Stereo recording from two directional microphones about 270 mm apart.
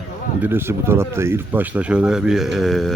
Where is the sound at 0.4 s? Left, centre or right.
Centre.